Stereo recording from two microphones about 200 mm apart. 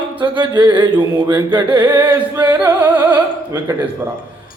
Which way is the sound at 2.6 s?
10° right (ahead or behind).